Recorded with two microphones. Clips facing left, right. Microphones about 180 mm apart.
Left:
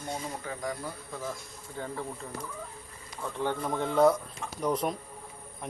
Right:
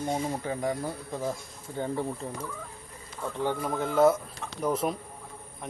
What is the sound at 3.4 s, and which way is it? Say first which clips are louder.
Speech: right 1 dB; 5° right (ahead or behind).